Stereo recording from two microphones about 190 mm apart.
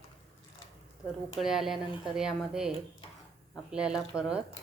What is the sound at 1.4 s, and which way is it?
Speech, centre (ahead or behind).